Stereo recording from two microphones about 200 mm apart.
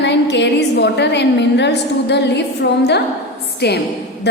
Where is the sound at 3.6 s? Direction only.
55° left (ahead or behind).